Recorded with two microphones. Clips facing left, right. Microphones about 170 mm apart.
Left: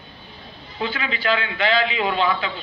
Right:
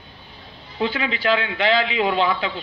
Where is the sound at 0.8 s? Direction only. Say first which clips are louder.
Right 3 dB; 15° right (ahead or behind).